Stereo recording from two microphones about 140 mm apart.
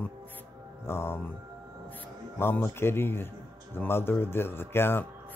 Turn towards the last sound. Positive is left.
turn(degrees=15)  # may be behind; listen again after turning